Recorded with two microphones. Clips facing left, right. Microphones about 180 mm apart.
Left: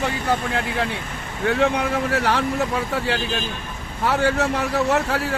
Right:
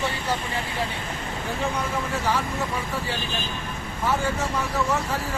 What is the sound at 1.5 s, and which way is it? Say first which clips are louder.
Speech: left 9 dB; 75° left (ahead or behind).